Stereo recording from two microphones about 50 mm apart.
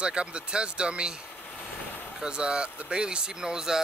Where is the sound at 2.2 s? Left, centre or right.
Centre.